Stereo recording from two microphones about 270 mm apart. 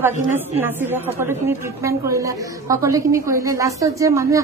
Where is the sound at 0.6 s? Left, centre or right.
Centre.